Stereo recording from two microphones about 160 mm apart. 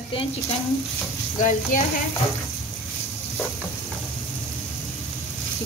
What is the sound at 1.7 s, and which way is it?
Stir, 55° left (ahead or behind).